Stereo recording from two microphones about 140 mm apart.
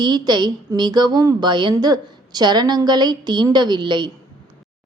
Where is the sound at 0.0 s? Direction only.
30° right (ahead or behind).